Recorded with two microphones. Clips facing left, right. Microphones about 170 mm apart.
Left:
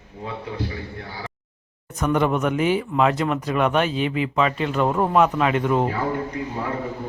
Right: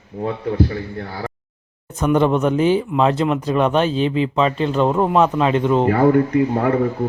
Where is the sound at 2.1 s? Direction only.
30° right (ahead or behind).